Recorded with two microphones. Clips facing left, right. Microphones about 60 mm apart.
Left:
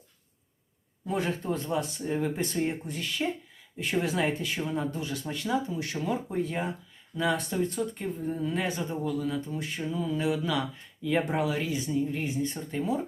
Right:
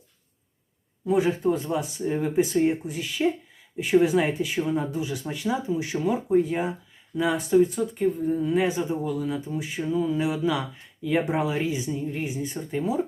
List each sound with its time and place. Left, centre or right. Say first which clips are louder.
1.0 s speech: right 8 dB; centre
11.3 s speech: right 3 dB; right
11.9 s speech: even; centre